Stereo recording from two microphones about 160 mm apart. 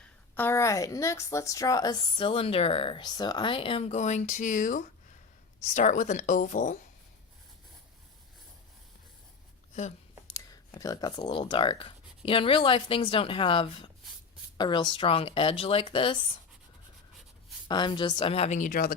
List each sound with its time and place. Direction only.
0.3 s a woman's voice: 15° left (ahead or behind); by 6.7 s 50° left (ahead or behind)
10.3 s speech: 25° left (ahead or behind)
17.7 s speech: 30° left (ahead or behind); by 18.9 s 65° left (ahead or behind)